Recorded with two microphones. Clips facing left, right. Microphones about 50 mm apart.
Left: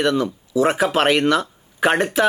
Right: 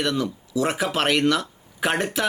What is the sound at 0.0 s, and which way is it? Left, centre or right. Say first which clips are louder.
Speech: left 5 dB; centre.